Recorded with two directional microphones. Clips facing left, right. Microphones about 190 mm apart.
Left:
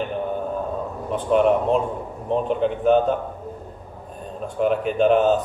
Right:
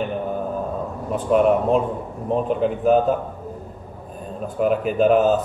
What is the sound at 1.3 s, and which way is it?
Speech, centre (ahead or behind).